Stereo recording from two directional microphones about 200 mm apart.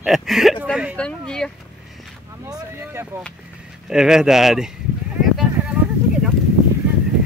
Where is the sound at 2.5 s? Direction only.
10° right (ahead or behind).